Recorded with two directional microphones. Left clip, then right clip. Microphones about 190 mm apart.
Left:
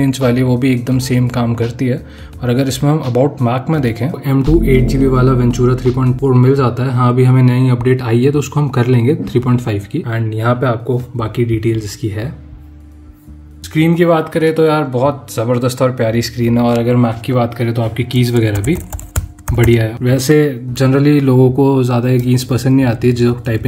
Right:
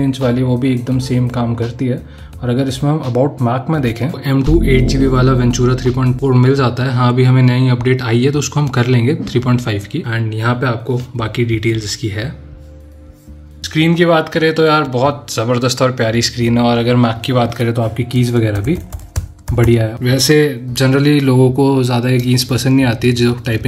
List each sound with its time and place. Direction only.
0.3 s speech: 15° left (ahead or behind)
13.7 s speech: 10° left (ahead or behind)